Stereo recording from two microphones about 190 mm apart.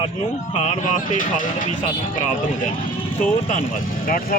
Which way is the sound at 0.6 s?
40° left (ahead or behind).